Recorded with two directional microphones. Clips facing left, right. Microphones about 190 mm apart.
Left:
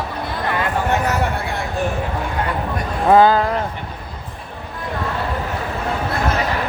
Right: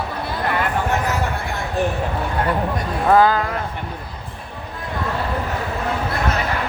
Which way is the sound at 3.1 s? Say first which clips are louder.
Left 3 dB; 25° left (ahead or behind).